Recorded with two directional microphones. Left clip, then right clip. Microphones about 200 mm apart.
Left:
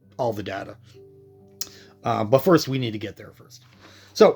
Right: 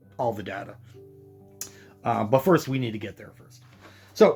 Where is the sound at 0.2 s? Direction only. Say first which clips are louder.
Left 2 dB; 55° left (ahead or behind).